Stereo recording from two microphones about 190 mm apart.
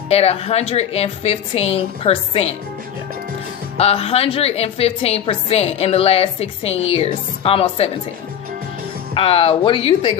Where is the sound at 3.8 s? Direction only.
30° left (ahead or behind).